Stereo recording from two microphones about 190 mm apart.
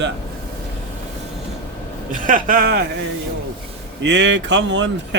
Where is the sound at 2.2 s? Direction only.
45° right (ahead or behind).